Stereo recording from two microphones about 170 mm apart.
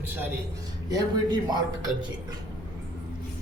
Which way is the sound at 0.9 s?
25° right (ahead or behind).